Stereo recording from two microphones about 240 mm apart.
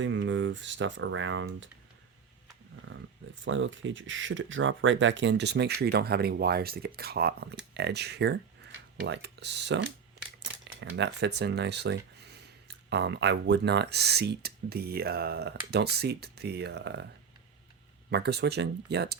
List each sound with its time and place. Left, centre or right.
0.0 s speech: right
2.9 s speech: right
18.1 s speech: right